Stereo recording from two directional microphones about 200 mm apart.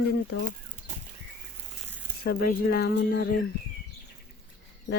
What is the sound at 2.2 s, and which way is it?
Speech, 50° left (ahead or behind).